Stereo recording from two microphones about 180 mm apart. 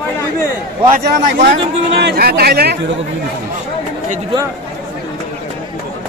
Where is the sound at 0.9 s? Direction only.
60° right (ahead or behind).